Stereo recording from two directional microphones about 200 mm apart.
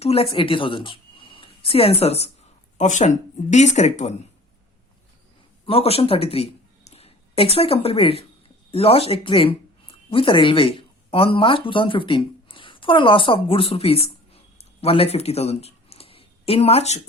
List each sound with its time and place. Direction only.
0.0 s a woman's voice: 30° left (ahead or behind)
5.6 s speech: 30° left (ahead or behind)